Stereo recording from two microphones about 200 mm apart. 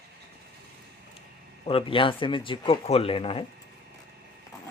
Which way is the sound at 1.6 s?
25° left (ahead or behind).